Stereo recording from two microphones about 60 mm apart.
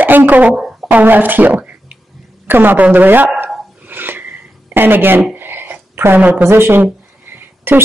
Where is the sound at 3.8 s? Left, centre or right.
Right.